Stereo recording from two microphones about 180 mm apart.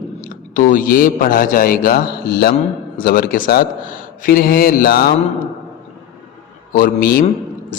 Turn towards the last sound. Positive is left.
turn(degrees=50)  # may be behind; listen again after turning